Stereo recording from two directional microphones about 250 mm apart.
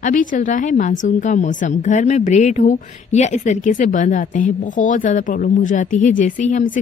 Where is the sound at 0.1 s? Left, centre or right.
Left.